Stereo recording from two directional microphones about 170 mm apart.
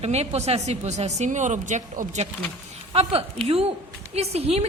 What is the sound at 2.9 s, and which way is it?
A woman's voice, 35° right (ahead or behind).